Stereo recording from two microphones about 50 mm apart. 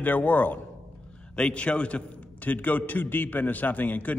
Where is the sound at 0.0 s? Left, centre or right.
Left.